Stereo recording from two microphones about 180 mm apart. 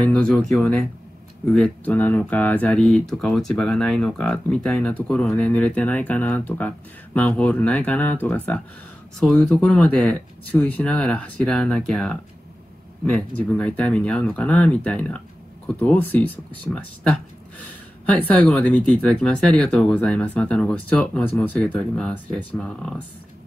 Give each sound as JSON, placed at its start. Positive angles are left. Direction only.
{"t": 0.0, "sound": "speech", "side_deg": 5}